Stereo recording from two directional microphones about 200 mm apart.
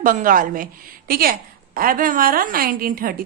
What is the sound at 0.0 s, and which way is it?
A woman's voice, 40° right (ahead or behind).